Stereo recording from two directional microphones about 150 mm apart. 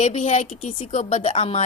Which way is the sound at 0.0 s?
45° left (ahead or behind).